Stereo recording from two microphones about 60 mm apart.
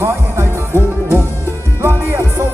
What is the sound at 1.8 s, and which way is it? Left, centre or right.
Music, right.